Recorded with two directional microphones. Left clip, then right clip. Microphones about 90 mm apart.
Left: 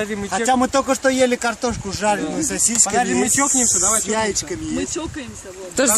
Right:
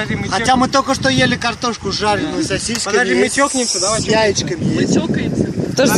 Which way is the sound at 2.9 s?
25° left (ahead or behind).